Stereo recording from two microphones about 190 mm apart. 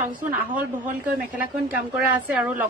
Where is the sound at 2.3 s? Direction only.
10° right (ahead or behind).